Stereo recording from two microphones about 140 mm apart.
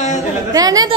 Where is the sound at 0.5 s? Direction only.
25° right (ahead or behind).